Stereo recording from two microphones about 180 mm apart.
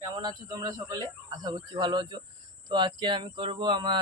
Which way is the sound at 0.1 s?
20° right (ahead or behind).